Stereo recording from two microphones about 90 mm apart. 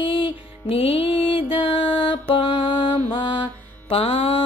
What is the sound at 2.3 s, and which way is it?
Music, 70° left (ahead or behind).